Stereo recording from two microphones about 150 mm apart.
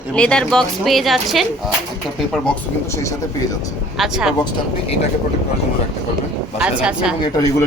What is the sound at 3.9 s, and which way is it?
Speech, 5° right (ahead or behind).